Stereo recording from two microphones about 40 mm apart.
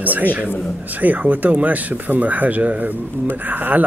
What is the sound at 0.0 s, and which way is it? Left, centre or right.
Speech, right.